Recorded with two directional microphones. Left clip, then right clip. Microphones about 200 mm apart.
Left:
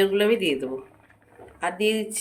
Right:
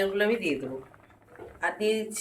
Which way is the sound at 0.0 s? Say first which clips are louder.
Left 5 dB; 50° left (ahead or behind).